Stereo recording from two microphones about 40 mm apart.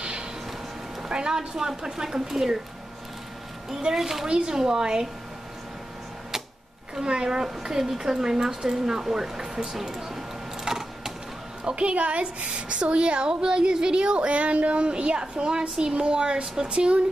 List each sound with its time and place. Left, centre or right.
0.0 s vehicle: right
1.0 s speech: centre
3.9 s speech: centre
4.3 s speech: centre
7.0 s a woman's voice: centre
9.8 s a sound: centre
11.6 s a woman's voice: right